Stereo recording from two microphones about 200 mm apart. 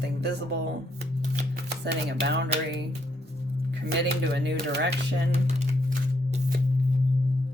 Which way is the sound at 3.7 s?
55° right (ahead or behind).